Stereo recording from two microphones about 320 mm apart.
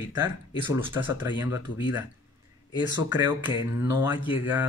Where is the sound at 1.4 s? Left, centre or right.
Left.